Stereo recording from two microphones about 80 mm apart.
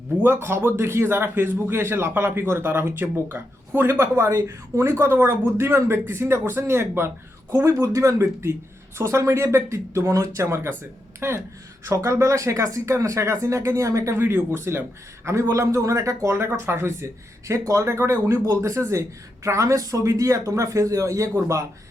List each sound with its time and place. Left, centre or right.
0.2 s speech: right
7.7 s speech: right
16.3 s speech: right